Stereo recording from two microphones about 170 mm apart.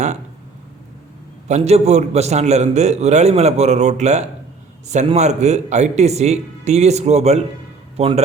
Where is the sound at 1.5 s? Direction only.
40° right (ahead or behind).